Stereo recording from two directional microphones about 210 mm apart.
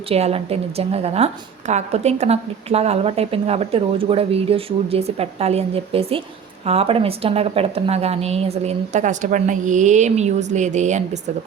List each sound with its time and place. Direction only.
0.1 s a woman's voice: 30° right (ahead or behind)